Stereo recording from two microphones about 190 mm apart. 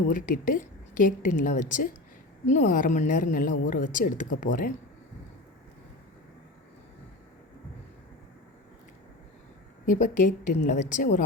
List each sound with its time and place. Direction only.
0.1 s a woman's voice: 45° left (ahead or behind)
9.8 s a woman's voice: 45° left (ahead or behind)